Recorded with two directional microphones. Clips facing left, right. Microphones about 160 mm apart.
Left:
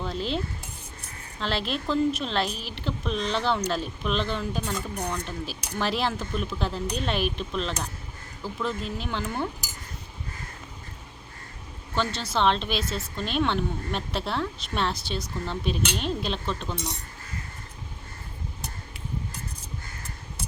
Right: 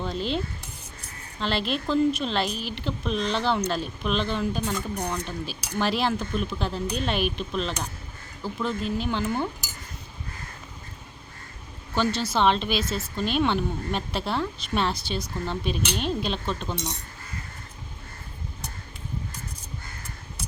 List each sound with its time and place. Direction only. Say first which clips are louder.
0.0 s cutlery: right 1 dB; centre (ahead or behind)
1.4 s a woman's voice: right 2 dB; centre (ahead or behind)
11.9 s a woman's voice: right 3 dB; 5° right (ahead or behind)